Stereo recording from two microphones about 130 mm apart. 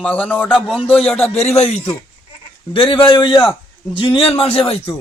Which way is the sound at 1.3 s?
55° left (ahead or behind).